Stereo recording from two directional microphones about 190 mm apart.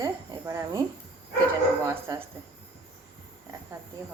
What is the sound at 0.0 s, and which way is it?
Speech, 20° right (ahead or behind).